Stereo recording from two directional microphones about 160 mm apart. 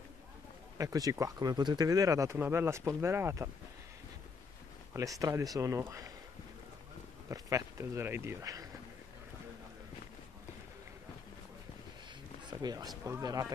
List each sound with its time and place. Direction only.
0.7 s speech: 20° right (ahead or behind)
4.9 s speech: 20° right (ahead or behind)
7.2 s speech: 20° right (ahead or behind)
12.4 s speech: 25° right (ahead or behind)